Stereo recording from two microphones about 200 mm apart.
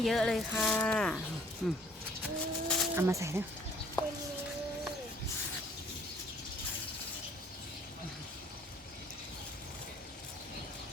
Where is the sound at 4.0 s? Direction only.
15° left (ahead or behind).